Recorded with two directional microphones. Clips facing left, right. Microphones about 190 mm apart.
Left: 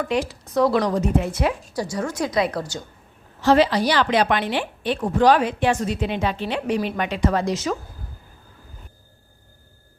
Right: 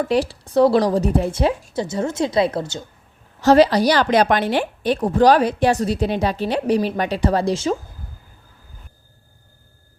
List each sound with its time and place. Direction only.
0.0 s speech: 35° right (ahead or behind)
3.4 s a woman's voice: 40° right (ahead or behind)